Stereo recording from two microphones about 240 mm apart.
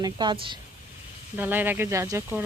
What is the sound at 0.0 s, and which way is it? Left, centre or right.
Speech, centre.